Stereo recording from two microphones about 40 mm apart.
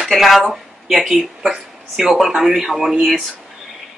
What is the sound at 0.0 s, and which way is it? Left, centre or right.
Speech, centre.